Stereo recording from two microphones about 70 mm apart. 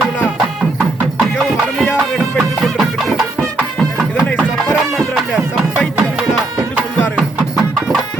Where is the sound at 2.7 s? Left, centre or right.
Centre.